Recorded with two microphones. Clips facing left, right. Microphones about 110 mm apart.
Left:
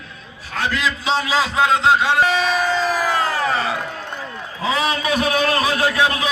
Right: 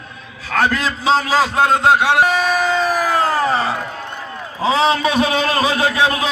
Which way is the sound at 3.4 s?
35° right (ahead or behind).